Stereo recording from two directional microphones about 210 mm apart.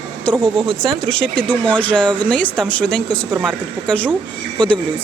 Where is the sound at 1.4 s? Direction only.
5° left (ahead or behind).